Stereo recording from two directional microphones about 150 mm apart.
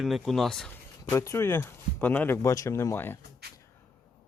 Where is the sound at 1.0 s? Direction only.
20° left (ahead or behind).